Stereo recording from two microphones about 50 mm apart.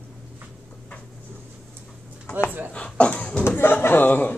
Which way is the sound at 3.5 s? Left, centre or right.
Left.